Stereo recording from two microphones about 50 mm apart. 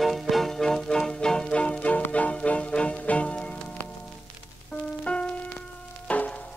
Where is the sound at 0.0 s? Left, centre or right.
Centre; by 3.5 s left.